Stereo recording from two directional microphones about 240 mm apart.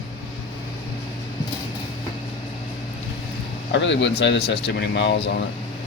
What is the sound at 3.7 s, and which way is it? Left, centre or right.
Speech, left.